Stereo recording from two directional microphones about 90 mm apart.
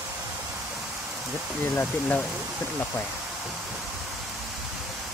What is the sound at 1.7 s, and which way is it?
Speech, 20° left (ahead or behind).